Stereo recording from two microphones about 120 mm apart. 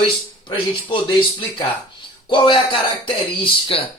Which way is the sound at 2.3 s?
45° left (ahead or behind).